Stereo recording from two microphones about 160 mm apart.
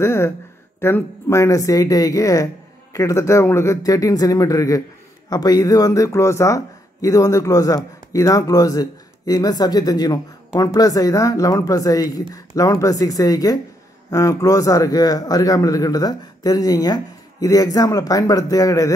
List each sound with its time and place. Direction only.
0.0 s speech: 15° left (ahead or behind)